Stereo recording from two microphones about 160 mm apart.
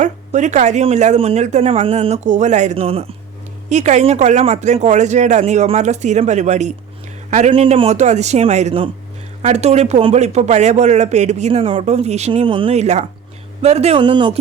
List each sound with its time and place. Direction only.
0.0 s a man's voice: 50° right (ahead or behind)
7.5 s speech: 35° right (ahead or behind)
14.0 s speech: 30° right (ahead or behind)